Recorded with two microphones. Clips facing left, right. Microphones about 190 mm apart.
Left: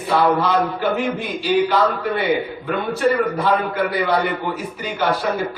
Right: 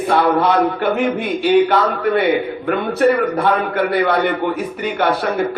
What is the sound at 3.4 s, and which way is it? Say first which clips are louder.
A man's voice: right 2 dB; 60° right (ahead or behind).